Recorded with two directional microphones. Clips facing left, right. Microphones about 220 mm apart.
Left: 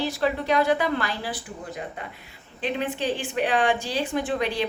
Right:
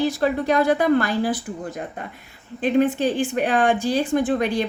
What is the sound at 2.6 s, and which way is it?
A woman's voice, 45° right (ahead or behind).